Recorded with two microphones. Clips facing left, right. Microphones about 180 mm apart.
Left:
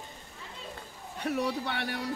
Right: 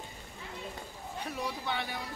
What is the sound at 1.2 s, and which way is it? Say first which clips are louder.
Speech: left 7 dB; 70° left (ahead or behind).